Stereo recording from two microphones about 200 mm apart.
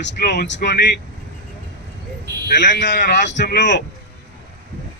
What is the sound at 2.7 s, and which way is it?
Speech, 60° left (ahead or behind).